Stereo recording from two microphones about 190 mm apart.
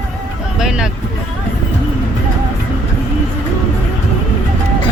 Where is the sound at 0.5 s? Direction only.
5° right (ahead or behind).